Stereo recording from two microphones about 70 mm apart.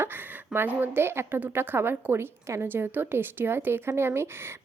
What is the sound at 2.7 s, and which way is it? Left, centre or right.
A woman's voice, right.